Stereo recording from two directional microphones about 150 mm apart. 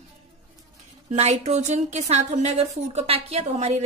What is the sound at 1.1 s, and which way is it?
A woman's voice, 45° right (ahead or behind).